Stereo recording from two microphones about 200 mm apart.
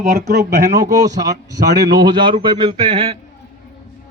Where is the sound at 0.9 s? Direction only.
15° right (ahead or behind).